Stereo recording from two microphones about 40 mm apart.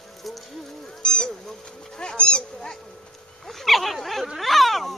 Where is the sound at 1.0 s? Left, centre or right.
Centre.